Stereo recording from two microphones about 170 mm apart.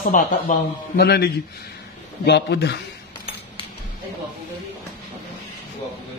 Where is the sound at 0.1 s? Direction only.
60° left (ahead or behind).